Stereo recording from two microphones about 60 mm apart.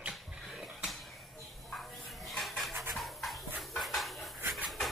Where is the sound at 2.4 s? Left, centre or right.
Centre.